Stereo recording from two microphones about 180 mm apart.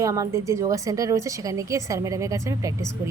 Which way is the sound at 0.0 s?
20° right (ahead or behind).